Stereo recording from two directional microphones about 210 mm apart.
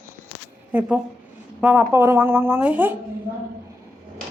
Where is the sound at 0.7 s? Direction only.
5° right (ahead or behind).